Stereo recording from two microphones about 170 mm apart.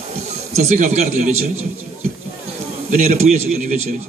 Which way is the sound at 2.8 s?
40° right (ahead or behind).